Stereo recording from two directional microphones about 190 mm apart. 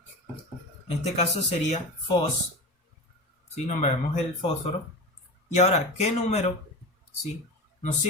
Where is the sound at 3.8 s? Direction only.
35° left (ahead or behind).